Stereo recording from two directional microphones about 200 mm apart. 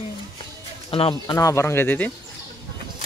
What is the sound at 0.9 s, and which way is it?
Speech, 25° left (ahead or behind).